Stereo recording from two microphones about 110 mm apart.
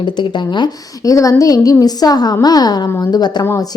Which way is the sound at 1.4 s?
35° left (ahead or behind).